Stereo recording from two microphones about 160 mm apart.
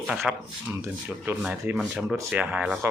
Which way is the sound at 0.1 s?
5° right (ahead or behind).